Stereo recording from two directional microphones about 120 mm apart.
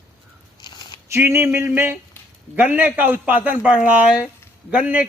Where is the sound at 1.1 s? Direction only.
20° right (ahead or behind).